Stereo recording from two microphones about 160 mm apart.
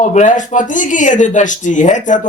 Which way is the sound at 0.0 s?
50° left (ahead or behind).